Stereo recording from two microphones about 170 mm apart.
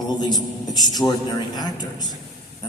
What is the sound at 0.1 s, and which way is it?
A man's voice, 25° left (ahead or behind).